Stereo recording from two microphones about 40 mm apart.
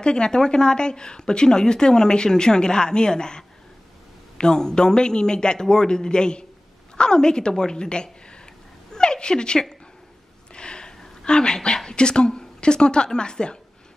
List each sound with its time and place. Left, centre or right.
0.0 s a woman's voice: left
8.9 s cat: centre
10.5 s a woman's voice: left